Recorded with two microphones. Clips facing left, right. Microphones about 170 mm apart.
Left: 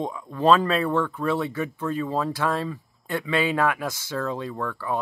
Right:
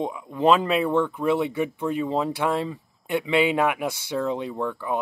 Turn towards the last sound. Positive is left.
turn(degrees=-15)  # may be behind; listen again after turning